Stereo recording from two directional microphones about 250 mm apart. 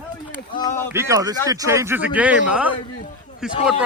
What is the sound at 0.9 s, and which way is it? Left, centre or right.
A man's voice, centre.